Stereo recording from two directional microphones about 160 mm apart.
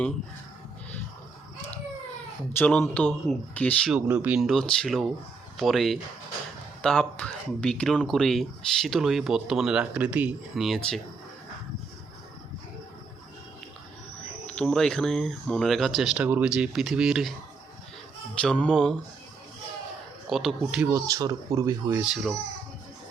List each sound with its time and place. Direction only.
2.6 s speech: 10° left (ahead or behind)
3.9 s speech: 10° right (ahead or behind)
14.4 s speech: 5° left (ahead or behind)
18.4 s speech: 5° left (ahead or behind)
20.3 s speech: centre (ahead or behind)
20.8 s speech: 20° right (ahead or behind)
22.0 s speech: 5° right (ahead or behind)